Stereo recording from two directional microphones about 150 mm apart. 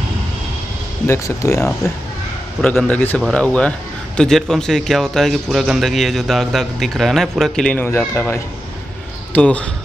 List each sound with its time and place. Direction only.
1.0 s speech: 20° left (ahead or behind)
2.6 s a man's voice: 10° left (ahead or behind)